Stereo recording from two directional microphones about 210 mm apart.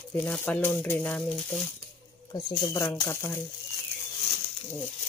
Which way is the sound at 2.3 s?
20° left (ahead or behind).